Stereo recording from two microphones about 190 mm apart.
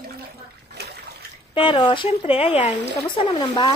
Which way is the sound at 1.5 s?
25° left (ahead or behind).